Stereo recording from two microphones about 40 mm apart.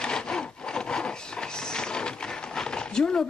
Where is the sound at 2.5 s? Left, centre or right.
Centre.